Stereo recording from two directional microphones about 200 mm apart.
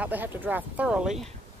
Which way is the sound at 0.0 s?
10° right (ahead or behind).